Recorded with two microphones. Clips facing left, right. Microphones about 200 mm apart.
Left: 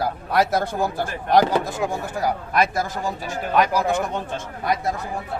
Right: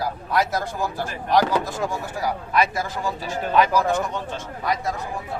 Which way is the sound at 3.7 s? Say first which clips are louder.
Even; 10° left (ahead or behind).